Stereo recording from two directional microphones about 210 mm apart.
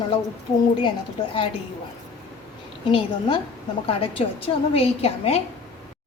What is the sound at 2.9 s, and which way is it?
A woman's voice, 25° left (ahead or behind).